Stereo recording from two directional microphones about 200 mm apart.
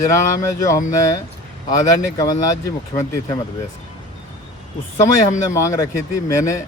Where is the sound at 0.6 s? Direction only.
15° left (ahead or behind).